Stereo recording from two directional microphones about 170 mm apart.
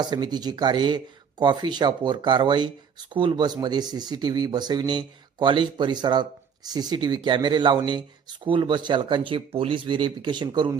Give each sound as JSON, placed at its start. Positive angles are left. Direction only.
{"t": 0.0, "sound": "speech", "side_deg": -25}